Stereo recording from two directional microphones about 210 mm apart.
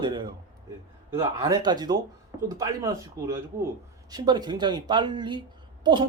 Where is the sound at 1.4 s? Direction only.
20° right (ahead or behind).